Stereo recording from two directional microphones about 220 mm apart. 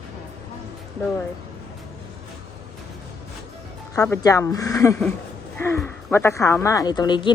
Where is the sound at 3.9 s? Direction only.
15° left (ahead or behind).